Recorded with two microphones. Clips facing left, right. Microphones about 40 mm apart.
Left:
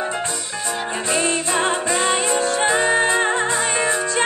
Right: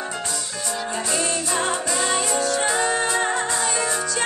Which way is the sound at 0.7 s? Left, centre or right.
Left.